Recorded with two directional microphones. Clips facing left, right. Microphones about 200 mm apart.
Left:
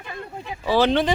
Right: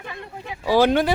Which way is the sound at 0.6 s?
10° right (ahead or behind).